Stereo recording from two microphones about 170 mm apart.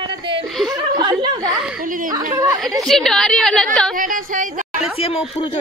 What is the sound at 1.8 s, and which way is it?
Speech, 50° right (ahead or behind).